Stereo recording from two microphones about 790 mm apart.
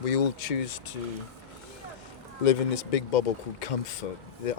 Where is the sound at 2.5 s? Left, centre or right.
Left.